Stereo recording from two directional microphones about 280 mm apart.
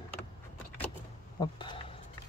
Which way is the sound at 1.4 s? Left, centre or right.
Centre.